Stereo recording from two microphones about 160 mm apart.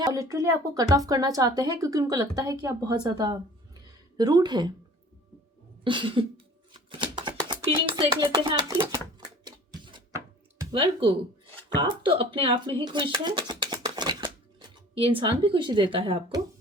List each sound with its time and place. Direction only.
0.0 s speech: 20° right (ahead or behind)
5.8 s a woman's voice: 30° right (ahead or behind)
7.3 s music: 30° right (ahead or behind)
10.6 s a woman's voice: 30° right (ahead or behind)